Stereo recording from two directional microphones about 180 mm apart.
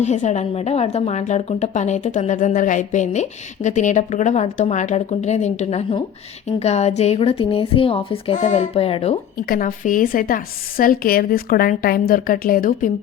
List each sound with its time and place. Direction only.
0.0 s a woman's voice: 40° left (ahead or behind)
9.5 s a woman's voice: 45° left (ahead or behind)